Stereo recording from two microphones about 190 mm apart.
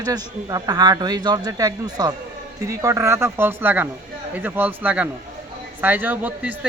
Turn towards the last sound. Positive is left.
turn(degrees=-10)  # may be behind; listen again after turning